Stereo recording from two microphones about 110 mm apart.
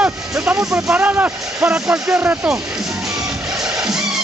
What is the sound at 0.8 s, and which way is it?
Speech, 15° right (ahead or behind).